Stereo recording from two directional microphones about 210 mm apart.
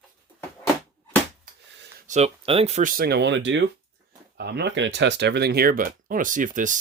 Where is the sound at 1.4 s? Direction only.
40° right (ahead or behind).